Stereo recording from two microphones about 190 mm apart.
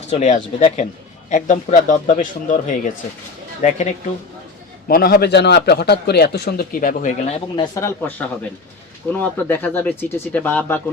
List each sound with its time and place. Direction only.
0.1 s a man's voice: 40° left (ahead or behind)
4.9 s a man's voice: 50° left (ahead or behind); by 10.8 s 10° left (ahead or behind)